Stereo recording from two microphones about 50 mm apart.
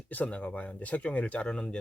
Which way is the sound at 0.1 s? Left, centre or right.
Left.